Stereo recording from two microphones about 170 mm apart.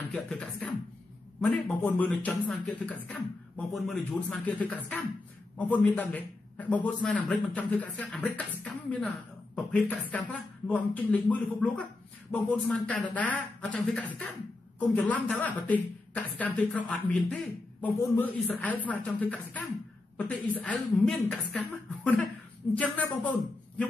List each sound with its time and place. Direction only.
0.1 s a woman's voice: 5° left (ahead or behind)